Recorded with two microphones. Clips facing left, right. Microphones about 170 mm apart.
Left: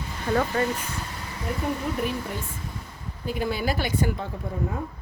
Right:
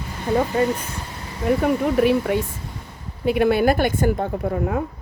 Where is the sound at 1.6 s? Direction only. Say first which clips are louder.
Right 9 dB; 75° right (ahead or behind).